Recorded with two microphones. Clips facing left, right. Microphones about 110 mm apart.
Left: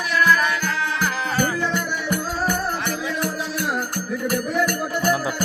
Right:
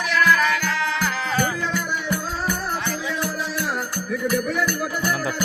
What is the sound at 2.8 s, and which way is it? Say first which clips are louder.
Music: left 1 dB; 65° left (ahead or behind).